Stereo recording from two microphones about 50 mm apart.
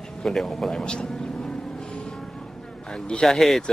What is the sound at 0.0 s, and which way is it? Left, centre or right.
Vehicle, centre.